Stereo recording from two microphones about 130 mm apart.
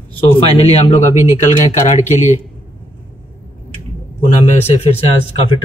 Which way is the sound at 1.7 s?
65° left (ahead or behind).